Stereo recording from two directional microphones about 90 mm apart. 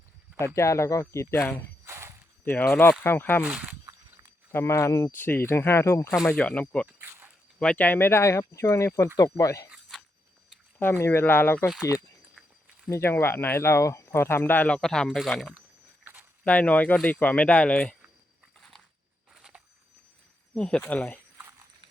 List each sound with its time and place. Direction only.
0.3 s speech: 30° left (ahead or behind)
1.3 s speech: 20° left (ahead or behind)
1.8 s walk: 30° right (ahead or behind)
2.4 s speech: 20° left (ahead or behind)
3.4 s speech: 15° right (ahead or behind)
4.5 s speech: 30° left (ahead or behind)
5.1 s speech: 20° left (ahead or behind)
6.2 s speech: 10° left (ahead or behind); by 9.6 s 40° left (ahead or behind)
10.8 s speech: 25° left (ahead or behind)
12.9 s speech: 30° left (ahead or behind)
14.8 s speech: 5° left (ahead or behind)
16.5 s speech: 15° left (ahead or behind)
19.3 s a sound: 10° right (ahead or behind)
20.6 s speech: 10° left (ahead or behind)